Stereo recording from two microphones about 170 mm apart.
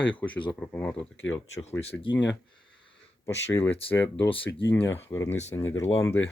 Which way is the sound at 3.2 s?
15° left (ahead or behind).